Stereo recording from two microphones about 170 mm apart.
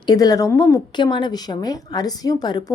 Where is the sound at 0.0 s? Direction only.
25° left (ahead or behind).